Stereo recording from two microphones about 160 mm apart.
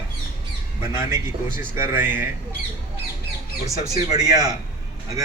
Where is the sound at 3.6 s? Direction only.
25° right (ahead or behind).